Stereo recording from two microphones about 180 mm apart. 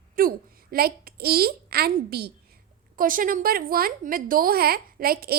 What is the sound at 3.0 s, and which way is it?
A woman's voice, 50° right (ahead or behind).